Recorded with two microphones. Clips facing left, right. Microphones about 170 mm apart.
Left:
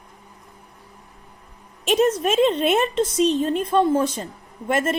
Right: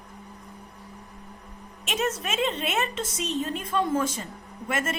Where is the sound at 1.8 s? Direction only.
35° left (ahead or behind).